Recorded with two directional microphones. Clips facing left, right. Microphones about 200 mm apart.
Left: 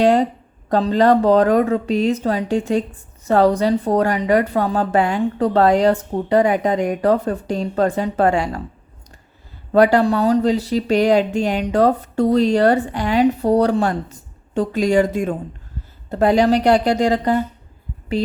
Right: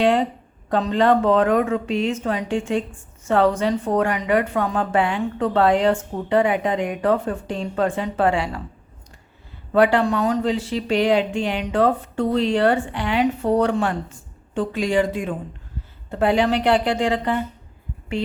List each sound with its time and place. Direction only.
0.0 s a sound: 40° left (ahead or behind)
0.7 s speech: 35° left (ahead or behind)
9.7 s speech: 40° left (ahead or behind)